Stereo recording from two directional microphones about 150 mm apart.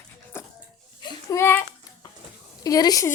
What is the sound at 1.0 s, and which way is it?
Speech, 20° left (ahead or behind).